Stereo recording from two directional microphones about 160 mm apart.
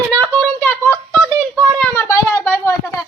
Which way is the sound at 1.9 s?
15° left (ahead or behind).